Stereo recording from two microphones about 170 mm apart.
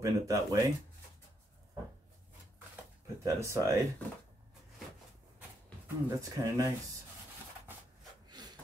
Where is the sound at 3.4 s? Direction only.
20° right (ahead or behind).